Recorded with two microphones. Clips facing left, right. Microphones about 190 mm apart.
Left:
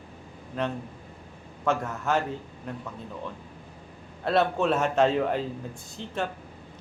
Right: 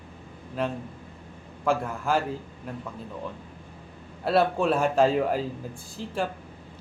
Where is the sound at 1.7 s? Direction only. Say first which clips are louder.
Right 1 dB; 10° right (ahead or behind).